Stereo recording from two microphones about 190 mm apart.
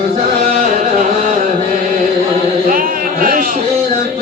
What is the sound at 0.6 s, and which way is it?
Carnatic music, 40° right (ahead or behind).